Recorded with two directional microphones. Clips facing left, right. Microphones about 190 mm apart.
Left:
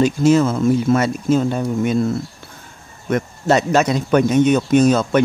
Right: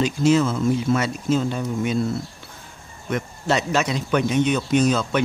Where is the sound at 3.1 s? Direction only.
45° left (ahead or behind).